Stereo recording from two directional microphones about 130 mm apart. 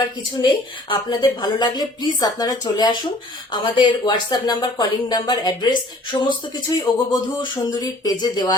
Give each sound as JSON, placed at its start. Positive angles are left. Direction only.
{"t": 0.0, "sound": "speech", "side_deg": 35}